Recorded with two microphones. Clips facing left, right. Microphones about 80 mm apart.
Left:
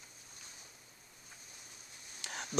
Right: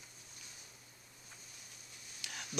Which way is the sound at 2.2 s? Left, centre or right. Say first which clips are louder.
Left 4 dB; left.